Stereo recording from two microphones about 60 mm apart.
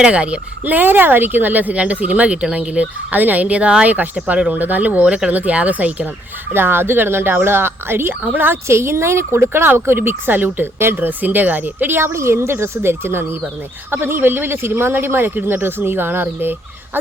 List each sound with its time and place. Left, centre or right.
0.0 s speech: centre
6.5 s speech: right
8.6 s speech: right